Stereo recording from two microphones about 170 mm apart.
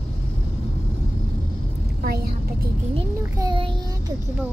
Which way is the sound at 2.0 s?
65° right (ahead or behind).